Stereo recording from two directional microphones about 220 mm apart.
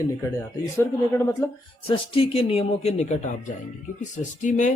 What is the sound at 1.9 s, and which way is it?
Speech, 25° left (ahead or behind).